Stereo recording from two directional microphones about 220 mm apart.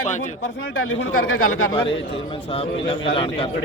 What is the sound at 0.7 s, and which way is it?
Speech, 65° left (ahead or behind).